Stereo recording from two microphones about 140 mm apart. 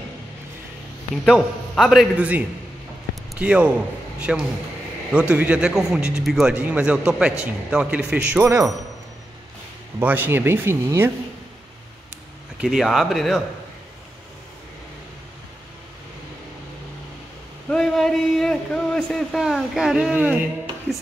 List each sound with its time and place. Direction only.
1.2 s a man's voice: centre (ahead or behind); by 8.6 s 15° right (ahead or behind)
9.9 s a man's voice: 15° right (ahead or behind)
12.5 s a man's voice: centre (ahead or behind)
17.6 s a man's voice: 5° left (ahead or behind)